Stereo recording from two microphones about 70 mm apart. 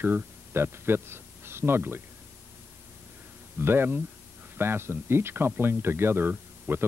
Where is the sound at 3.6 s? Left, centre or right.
Right.